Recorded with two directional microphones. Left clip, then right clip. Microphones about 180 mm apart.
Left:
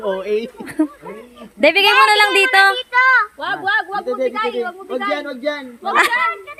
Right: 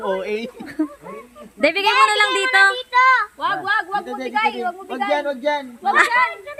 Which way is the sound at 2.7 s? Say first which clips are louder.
Left 2 dB; 20° left (ahead or behind).